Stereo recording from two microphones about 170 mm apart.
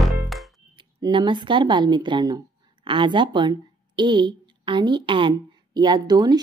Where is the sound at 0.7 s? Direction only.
30° right (ahead or behind).